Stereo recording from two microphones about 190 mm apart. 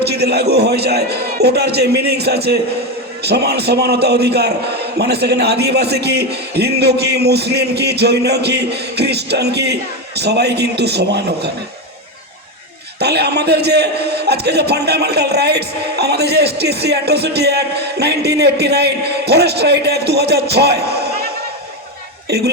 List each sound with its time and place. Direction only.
0.0 s a man's voice: 60° right (ahead or behind)
13.0 s a man's voice: 60° right (ahead or behind)
22.3 s speech: 55° right (ahead or behind)